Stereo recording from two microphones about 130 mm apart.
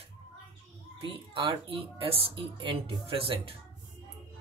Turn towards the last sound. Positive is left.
turn(degrees=-45)  # may be behind; listen again after turning